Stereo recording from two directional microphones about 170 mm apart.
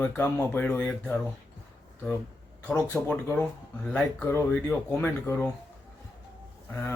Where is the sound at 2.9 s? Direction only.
10° left (ahead or behind).